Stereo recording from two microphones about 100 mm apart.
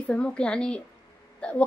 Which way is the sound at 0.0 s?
10° left (ahead or behind).